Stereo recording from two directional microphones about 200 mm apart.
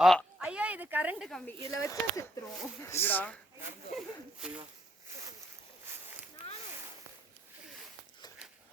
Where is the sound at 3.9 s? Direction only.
5° right (ahead or behind).